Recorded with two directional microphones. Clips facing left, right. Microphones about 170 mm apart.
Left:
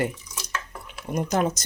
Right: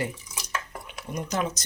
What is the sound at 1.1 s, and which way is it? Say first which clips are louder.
Speech: left 5 dB; 50° left (ahead or behind).